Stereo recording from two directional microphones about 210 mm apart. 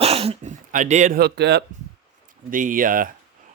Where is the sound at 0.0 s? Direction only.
30° right (ahead or behind); by 1.6 s 55° right (ahead or behind).